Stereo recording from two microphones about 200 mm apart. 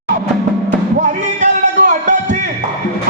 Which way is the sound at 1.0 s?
40° right (ahead or behind).